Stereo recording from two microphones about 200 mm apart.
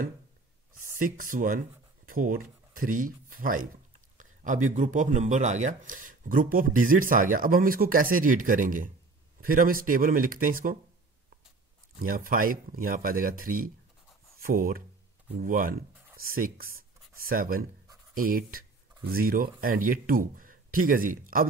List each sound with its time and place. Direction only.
0.9 s speech: 45° right (ahead or behind)
12.0 s speech: 45° right (ahead or behind)